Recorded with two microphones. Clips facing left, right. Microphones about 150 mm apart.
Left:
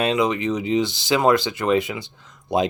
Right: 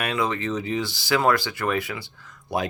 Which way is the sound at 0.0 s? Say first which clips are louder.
Left 5 dB; 20° left (ahead or behind).